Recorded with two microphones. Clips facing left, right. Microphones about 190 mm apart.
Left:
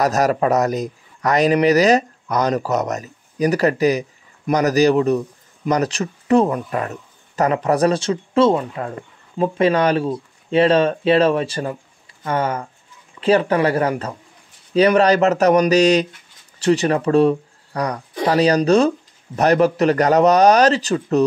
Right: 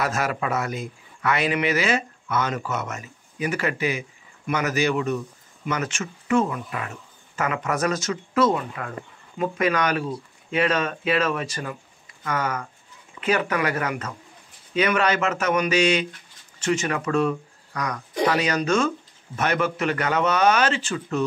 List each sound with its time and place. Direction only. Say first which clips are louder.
0.0 s speech: left 8 dB; 40° left (ahead or behind)